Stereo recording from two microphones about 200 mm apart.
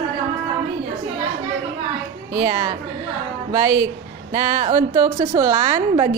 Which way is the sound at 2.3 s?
15° right (ahead or behind).